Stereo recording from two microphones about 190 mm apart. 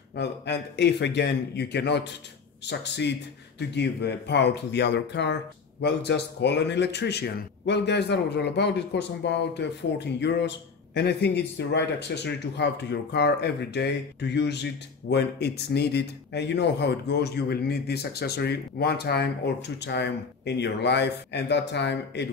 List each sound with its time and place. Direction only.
0.1 s speech: 65° left (ahead or behind)